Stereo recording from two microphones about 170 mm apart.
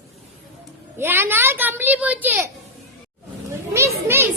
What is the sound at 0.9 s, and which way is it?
A woman's voice, 15° right (ahead or behind).